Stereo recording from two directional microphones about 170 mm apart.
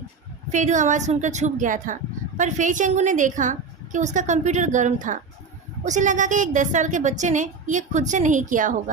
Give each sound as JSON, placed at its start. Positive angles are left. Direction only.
{"t": 0.5, "sound": "a woman's voice", "side_deg": -45}